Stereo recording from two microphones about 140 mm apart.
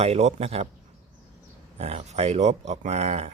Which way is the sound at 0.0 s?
50° right (ahead or behind).